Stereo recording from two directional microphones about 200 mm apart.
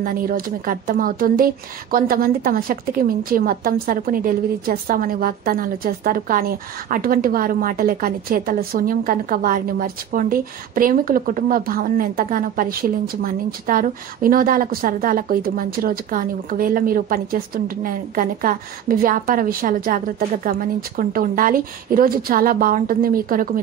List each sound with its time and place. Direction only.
0.0 s speech: 45° right (ahead or behind)